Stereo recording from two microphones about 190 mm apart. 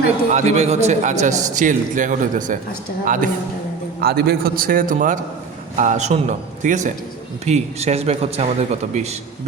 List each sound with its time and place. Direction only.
0.3 s a man's voice: 35° right (ahead or behind)
4.0 s a man's voice: 55° right (ahead or behind); by 9.0 s 35° right (ahead or behind)